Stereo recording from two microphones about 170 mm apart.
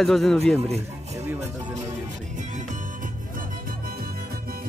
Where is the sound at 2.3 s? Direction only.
50° right (ahead or behind).